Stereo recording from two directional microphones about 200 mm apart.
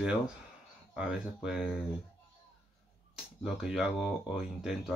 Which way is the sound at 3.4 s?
Centre (ahead or behind).